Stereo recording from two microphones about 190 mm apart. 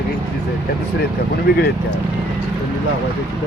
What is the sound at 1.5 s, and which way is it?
Speech, 55° left (ahead or behind).